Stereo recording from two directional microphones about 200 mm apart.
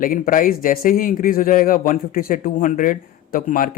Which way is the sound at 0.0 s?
45° left (ahead or behind).